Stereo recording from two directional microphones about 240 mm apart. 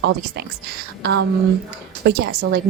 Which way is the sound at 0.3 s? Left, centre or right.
Right.